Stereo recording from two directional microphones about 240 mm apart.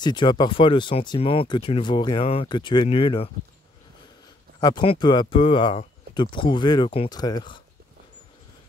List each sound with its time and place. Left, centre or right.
0.0 s speech: centre
4.6 s speech: centre